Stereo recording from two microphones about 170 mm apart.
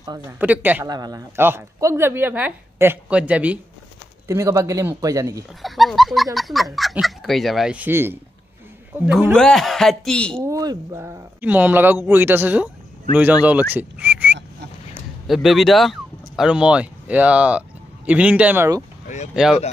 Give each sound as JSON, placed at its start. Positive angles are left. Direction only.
{"t": 0.0, "sound": "a man's voice", "side_deg": -20}
{"t": 0.4, "sound": "a woman's voice", "side_deg": -10}
{"t": 0.8, "sound": "a woman's voice", "side_deg": -25}
{"t": 4.3, "sound": "a man's voice", "side_deg": -20}
{"t": 5.6, "sound": "a woman's voice", "side_deg": 0}
{"t": 9.3, "sound": "speech", "side_deg": 5}
{"t": 10.5, "sound": "a woman's voice", "side_deg": -20}